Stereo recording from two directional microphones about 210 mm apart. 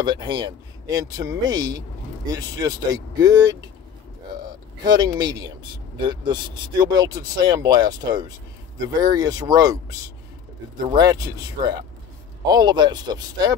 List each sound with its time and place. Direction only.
0.0 s speech: 20° right (ahead or behind)
4.8 s speech: 20° right (ahead or behind)